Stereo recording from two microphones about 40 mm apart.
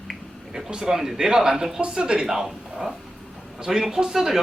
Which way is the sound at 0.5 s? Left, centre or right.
Centre.